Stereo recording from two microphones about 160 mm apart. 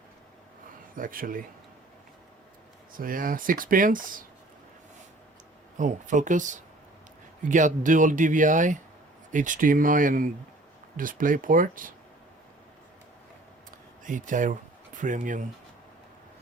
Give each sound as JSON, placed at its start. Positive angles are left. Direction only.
{"t": 0.9, "sound": "speech", "side_deg": -60}
{"t": 3.0, "sound": "speech", "side_deg": -60}
{"t": 5.7, "sound": "speech", "side_deg": -50}
{"t": 13.7, "sound": "a sound", "side_deg": -55}
{"t": 15.0, "sound": "speech", "side_deg": -55}